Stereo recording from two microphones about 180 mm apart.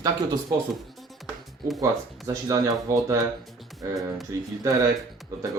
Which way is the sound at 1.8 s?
20° right (ahead or behind).